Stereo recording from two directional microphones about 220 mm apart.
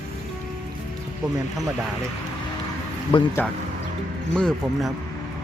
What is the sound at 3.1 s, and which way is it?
Speech, 25° left (ahead or behind).